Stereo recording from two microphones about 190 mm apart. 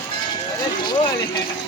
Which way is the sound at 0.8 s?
25° left (ahead or behind).